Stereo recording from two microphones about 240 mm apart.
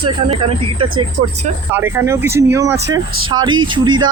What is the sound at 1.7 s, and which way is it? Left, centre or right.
Speech, centre.